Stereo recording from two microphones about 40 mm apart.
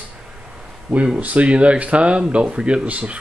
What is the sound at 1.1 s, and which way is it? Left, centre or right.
Speech, right.